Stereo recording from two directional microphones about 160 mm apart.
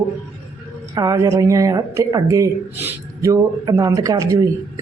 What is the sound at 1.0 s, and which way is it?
Speech, 20° right (ahead or behind).